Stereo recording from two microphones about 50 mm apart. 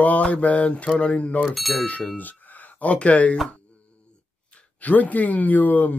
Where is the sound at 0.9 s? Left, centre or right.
Left.